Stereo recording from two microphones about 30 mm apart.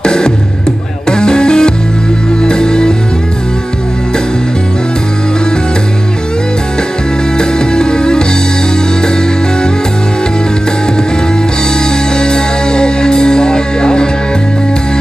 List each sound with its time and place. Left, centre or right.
0.0 s music: left
7.3 s music: left
12.2 s music: left